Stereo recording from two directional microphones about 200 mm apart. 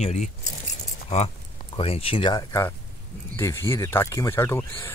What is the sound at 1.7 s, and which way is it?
Speech, 30° left (ahead or behind).